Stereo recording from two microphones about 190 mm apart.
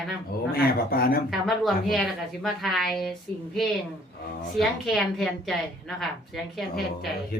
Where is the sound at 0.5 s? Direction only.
55° left (ahead or behind).